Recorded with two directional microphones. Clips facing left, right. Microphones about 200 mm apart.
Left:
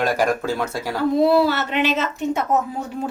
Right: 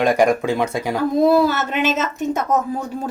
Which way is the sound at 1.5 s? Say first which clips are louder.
Right 1 dB; 45° right (ahead or behind).